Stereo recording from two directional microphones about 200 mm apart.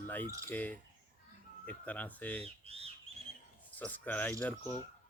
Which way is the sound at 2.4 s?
30° right (ahead or behind).